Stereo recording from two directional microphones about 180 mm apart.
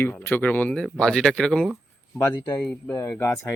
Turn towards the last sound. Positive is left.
turn(degrees=15)  # may be behind; listen again after turning